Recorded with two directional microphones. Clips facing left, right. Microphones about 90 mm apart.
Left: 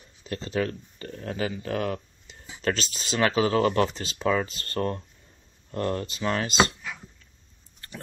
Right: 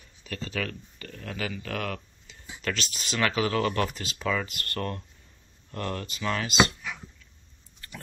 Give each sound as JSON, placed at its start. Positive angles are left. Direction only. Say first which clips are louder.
{"t": 0.2, "sound": "speech", "louder": "left 5 dB", "side_deg": 30}